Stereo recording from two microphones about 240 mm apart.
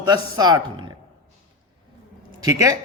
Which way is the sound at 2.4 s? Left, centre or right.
Centre.